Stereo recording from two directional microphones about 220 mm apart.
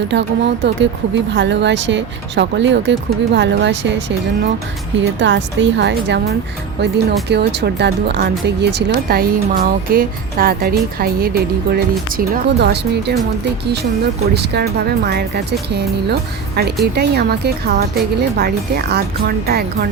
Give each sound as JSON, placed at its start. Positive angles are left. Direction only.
{"t": 0.1, "sound": "speech", "side_deg": -55}
{"t": 4.9, "sound": "speech", "side_deg": -55}
{"t": 14.3, "sound": "speech", "side_deg": -45}
{"t": 16.8, "sound": "speech", "side_deg": -50}